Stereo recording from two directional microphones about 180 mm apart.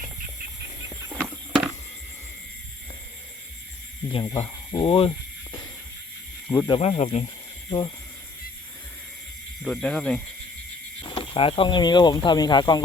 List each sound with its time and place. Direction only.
1.1 s a sound: centre (ahead or behind)
4.1 s speech: 25° left (ahead or behind)
6.7 s speech: 35° left (ahead or behind)
7.7 s speech: 25° left (ahead or behind)
9.6 s speech: centre (ahead or behind)
11.1 s speech: 30° left (ahead or behind)